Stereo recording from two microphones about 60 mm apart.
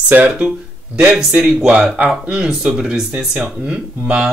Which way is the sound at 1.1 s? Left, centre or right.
Centre.